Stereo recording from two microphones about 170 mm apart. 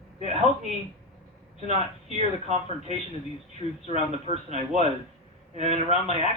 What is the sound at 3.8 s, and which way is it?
Speech, 40° right (ahead or behind).